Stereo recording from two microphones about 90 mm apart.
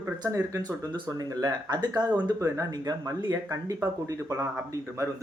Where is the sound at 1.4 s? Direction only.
50° right (ahead or behind).